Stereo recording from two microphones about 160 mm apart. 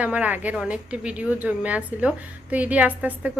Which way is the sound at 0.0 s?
10° right (ahead or behind).